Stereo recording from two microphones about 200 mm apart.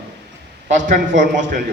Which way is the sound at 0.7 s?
40° right (ahead or behind).